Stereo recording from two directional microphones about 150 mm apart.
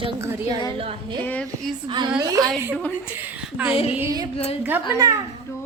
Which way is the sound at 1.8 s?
30° right (ahead or behind).